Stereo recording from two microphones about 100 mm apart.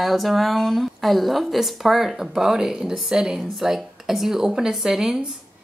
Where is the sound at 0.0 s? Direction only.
Centre (ahead or behind).